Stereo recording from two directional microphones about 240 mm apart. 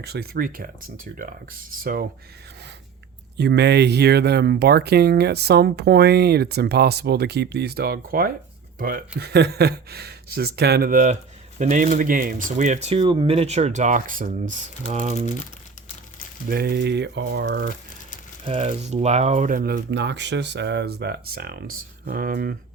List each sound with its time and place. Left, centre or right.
0.0 s speech: right
1.8 s speech: right
3.3 s speech: right
16.5 s speech: right
18.4 s speech: right